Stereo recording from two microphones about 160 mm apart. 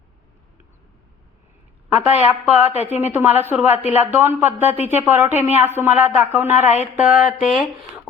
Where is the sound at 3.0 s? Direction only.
10° right (ahead or behind).